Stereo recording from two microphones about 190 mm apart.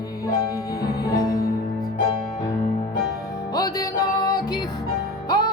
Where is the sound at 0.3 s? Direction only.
20° left (ahead or behind).